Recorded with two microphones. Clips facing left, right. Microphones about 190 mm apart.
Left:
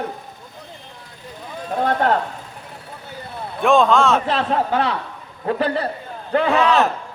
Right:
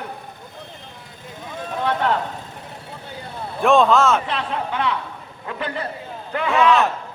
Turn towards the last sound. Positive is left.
turn(degrees=35)  # may be behind; listen again after turning